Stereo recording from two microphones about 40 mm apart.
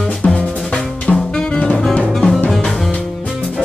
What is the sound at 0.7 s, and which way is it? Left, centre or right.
Drum kit, centre.